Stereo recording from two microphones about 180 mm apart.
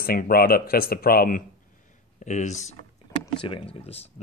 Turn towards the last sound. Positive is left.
turn(degrees=35)  # may be behind; listen again after turning